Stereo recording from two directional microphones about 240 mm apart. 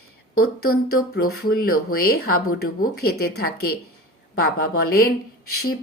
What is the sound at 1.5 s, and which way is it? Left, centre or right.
Speech, left.